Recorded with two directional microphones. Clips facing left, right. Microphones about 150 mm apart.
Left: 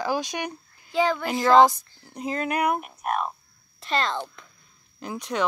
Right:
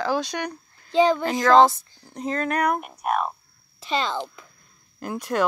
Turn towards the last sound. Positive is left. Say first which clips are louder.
# right 4 dB
turn(degrees=0)  # may be behind; listen again after turning